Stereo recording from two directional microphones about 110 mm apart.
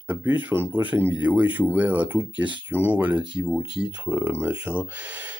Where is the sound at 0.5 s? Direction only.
25° right (ahead or behind).